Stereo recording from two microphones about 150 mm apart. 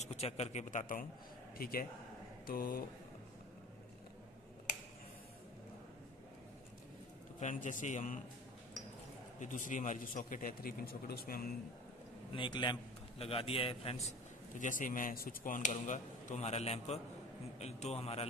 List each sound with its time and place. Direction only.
0.0 s a man's voice: 45° left (ahead or behind)
1.6 s speech: 80° left
7.3 s speech: 55° left (ahead or behind)
9.4 s speech: 60° left (ahead or behind); by 11.5 s 85° left
12.4 s a man's voice: 30° left (ahead or behind)
14.6 s a man's voice: 60° left (ahead or behind); by 18.2 s 45° left (ahead or behind)